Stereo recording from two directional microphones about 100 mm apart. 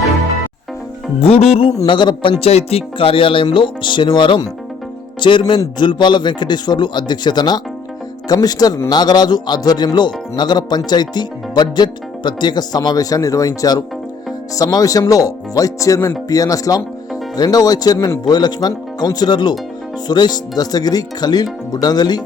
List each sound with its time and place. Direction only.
1.2 s music: 90° left
1.9 s speech: 50° left (ahead or behind)
2.4 s speech: 90° left; by 22.2 s 45° left (ahead or behind)